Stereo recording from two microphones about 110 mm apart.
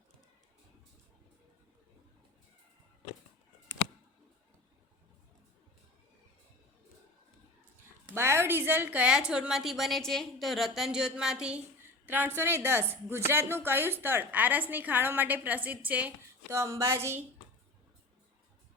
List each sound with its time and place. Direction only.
8.1 s a woman's voice: 25° right (ahead or behind)
16.5 s a woman's voice: 25° right (ahead or behind)